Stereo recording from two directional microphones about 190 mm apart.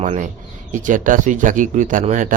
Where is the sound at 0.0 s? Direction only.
35° right (ahead or behind).